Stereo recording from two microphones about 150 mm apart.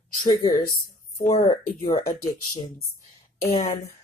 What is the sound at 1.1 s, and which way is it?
Speech, 60° left (ahead or behind).